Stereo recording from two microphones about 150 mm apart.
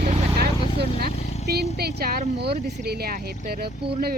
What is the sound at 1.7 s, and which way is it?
Speech, 90° right.